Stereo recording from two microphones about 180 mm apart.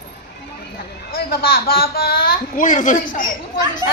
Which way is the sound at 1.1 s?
55° left (ahead or behind).